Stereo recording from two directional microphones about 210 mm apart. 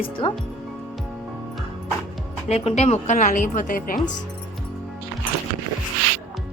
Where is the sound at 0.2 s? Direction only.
25° left (ahead or behind).